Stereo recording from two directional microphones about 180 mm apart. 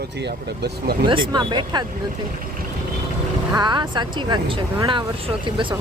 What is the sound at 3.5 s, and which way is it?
Speech, 25° right (ahead or behind).